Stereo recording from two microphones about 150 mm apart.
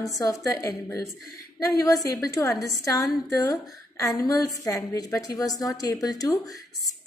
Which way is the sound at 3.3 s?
25° left (ahead or behind).